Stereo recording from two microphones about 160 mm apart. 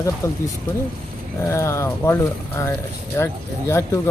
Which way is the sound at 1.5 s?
20° left (ahead or behind).